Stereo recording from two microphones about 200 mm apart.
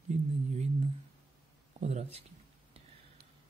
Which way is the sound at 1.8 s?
35° right (ahead or behind).